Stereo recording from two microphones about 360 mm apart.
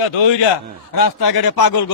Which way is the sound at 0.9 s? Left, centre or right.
Left.